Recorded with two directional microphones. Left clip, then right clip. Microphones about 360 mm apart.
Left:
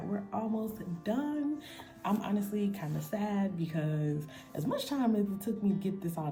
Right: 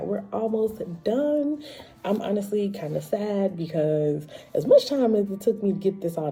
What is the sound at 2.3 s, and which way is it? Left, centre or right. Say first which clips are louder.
Speech: right 10 dB; right.